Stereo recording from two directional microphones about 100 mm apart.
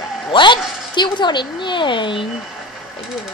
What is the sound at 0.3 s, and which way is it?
A woman's voice, 50° left (ahead or behind).